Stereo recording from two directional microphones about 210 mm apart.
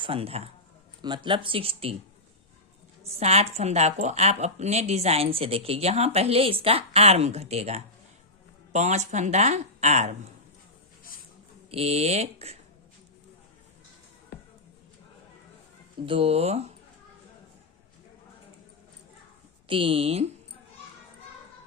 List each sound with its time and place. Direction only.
0.0 s speech: 25° right (ahead or behind)
3.0 s speech: 30° right (ahead or behind)
11.7 s speech: 30° right (ahead or behind)
16.0 s speech: 25° right (ahead or behind)
19.6 s speech: 25° right (ahead or behind)